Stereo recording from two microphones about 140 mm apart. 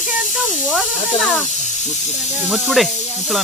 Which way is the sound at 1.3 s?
60° left (ahead or behind).